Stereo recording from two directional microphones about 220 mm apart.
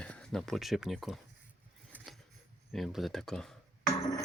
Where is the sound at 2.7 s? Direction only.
Centre (ahead or behind).